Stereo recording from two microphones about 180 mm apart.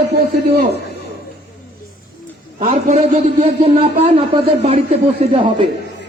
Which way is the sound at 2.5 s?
35° right (ahead or behind).